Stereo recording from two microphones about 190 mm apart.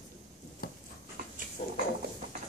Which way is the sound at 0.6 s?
50° left (ahead or behind).